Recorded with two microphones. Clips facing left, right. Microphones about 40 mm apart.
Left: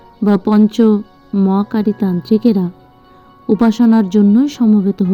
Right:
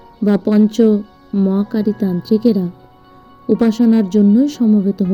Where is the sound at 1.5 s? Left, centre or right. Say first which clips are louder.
Left 2 dB; left.